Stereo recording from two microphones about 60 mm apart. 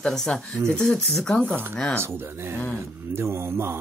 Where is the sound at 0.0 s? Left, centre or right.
Centre.